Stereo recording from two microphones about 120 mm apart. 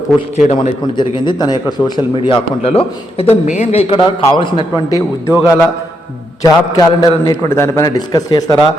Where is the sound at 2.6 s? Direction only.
55° left (ahead or behind).